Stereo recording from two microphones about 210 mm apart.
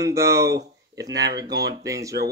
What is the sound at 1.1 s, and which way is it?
Speech, 50° right (ahead or behind).